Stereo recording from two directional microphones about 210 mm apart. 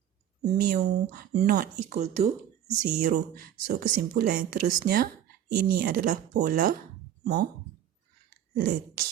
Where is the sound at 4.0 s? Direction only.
50° right (ahead or behind).